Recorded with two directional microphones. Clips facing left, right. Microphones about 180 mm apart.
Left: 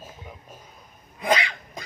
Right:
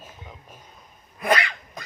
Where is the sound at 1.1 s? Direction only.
20° left (ahead or behind).